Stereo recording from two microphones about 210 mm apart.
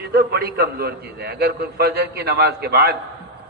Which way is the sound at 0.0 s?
50° right (ahead or behind).